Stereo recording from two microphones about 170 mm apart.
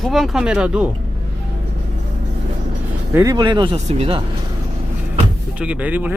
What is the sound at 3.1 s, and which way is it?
Speech, 15° right (ahead or behind).